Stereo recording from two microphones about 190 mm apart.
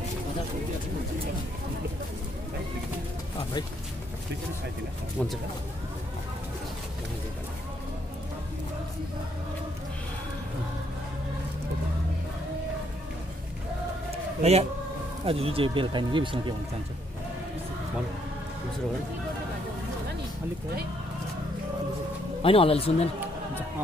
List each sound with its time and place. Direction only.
14.4 s speech: 35° right (ahead or behind)
22.4 s speech: 30° left (ahead or behind)